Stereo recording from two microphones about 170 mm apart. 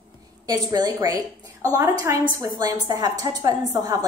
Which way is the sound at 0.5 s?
20° right (ahead or behind).